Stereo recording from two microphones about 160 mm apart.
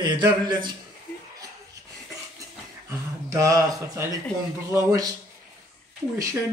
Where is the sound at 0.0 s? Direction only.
25° right (ahead or behind).